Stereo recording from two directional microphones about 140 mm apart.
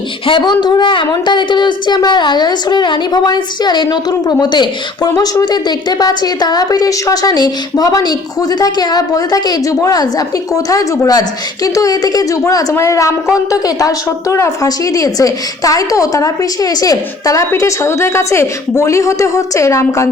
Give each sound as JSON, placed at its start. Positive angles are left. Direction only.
{"t": 0.3, "sound": "speech", "side_deg": 35}